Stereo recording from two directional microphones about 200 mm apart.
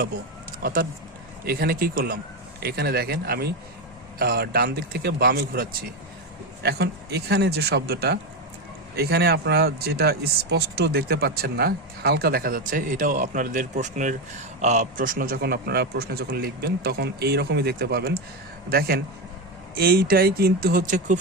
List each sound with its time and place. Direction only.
0.6 s speech: 45° right (ahead or behind)